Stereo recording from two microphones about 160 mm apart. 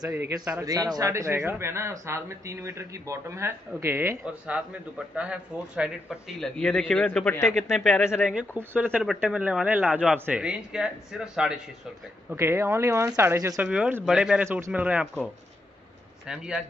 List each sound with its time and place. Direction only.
0.7 s speech: 25° right (ahead or behind); by 11.6 s 5° right (ahead or behind)
12.3 s speech: 15° right (ahead or behind)
16.3 s speech: 5° right (ahead or behind)